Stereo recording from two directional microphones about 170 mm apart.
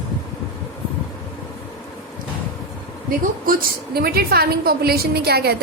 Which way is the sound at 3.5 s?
65° right (ahead or behind).